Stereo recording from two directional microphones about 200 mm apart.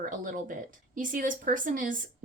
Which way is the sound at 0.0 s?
40° right (ahead or behind).